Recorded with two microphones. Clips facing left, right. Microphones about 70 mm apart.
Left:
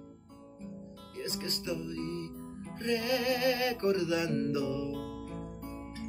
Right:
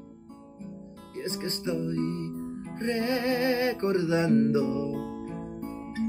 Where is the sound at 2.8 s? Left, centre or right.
Right.